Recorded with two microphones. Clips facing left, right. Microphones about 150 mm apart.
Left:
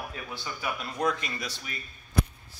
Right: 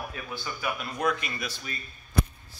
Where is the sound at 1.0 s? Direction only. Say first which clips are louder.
Left 1 dB; 25° left (ahead or behind).